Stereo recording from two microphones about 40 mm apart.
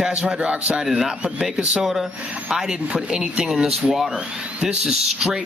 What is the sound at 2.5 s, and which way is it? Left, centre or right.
Speech, centre.